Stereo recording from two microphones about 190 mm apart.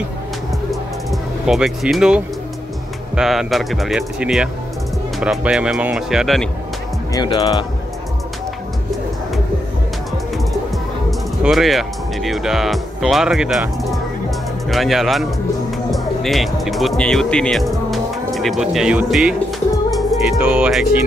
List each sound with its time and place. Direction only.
0.7 s music: centre (ahead or behind)
3.2 s speech: centre (ahead or behind)
7.2 s speech: 20° left (ahead or behind)
11.1 s speech: centre (ahead or behind)
14.7 s speech: centre (ahead or behind)